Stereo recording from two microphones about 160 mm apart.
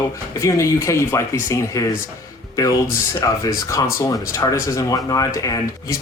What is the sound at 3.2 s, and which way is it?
Speech, 20° left (ahead or behind).